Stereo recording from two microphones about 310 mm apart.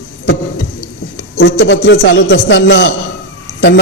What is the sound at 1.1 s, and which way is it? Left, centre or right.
A man's voice, left.